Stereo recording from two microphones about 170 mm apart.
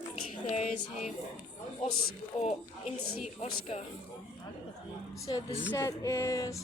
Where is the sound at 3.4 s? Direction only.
40° left (ahead or behind).